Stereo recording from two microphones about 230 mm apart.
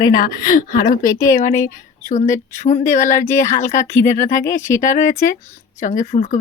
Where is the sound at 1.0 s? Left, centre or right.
Centre.